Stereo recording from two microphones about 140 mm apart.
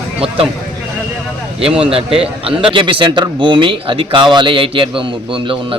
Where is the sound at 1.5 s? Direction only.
40° right (ahead or behind).